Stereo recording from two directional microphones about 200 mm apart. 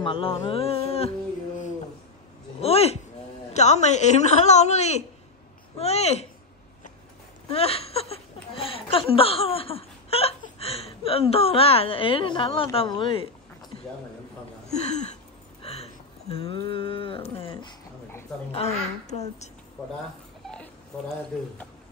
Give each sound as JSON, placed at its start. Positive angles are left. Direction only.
{"t": 0.0, "sound": "music", "side_deg": 25}
{"t": 0.5, "sound": "a sound", "side_deg": 30}
{"t": 2.6, "sound": "speech", "side_deg": 30}
{"t": 7.4, "sound": "speech", "side_deg": 30}
{"t": 14.9, "sound": "speech", "side_deg": 35}
{"t": 15.6, "sound": "a sound", "side_deg": 30}
{"t": 18.5, "sound": "speech", "side_deg": 30}
{"t": 20.9, "sound": "speech", "side_deg": 5}